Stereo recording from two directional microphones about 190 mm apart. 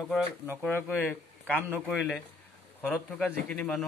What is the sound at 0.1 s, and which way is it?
Speech, 5° right (ahead or behind).